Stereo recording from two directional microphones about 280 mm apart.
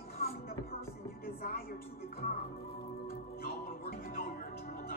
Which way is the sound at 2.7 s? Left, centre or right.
Left.